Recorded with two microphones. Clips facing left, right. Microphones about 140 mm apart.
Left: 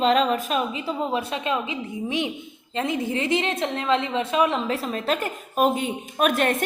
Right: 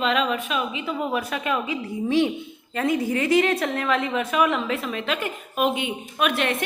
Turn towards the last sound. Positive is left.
turn(degrees=45)  # may be behind; listen again after turning